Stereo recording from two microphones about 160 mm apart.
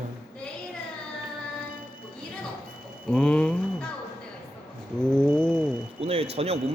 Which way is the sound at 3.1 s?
5° left (ahead or behind).